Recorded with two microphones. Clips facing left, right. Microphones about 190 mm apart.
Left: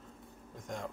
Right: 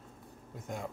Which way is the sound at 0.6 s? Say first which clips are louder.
Right 1 dB; 5° right (ahead or behind).